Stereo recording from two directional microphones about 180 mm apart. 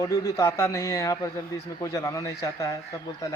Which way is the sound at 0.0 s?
20° left (ahead or behind).